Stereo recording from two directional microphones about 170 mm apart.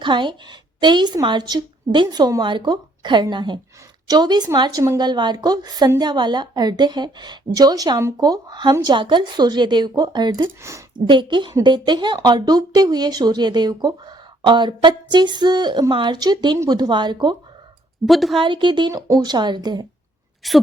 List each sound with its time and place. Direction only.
0.0 s a woman's voice: 25° right (ahead or behind)
11.0 s a woman's voice: 30° right (ahead or behind)
18.0 s a woman's voice: centre (ahead or behind)
18.3 s a woman's voice: 30° right (ahead or behind)
20.4 s a woman's voice: centre (ahead or behind)